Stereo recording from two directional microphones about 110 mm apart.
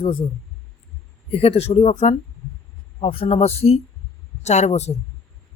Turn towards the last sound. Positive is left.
turn(degrees=90)